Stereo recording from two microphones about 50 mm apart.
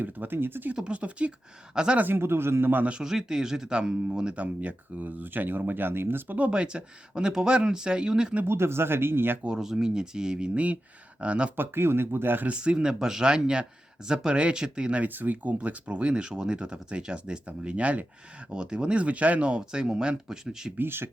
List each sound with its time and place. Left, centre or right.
0.0 s speech: right
0.9 s speech: right
1.7 s speech: centre
2.1 s speech: right
3.0 s speech: centre
4.4 s speech: right
6.5 s speech: centre
8.4 s speech: right
9.6 s speech: centre
11.5 s speech: right
12.5 s speech: right
15.0 s speech: right
18.5 s speech: centre
20.7 s speech: right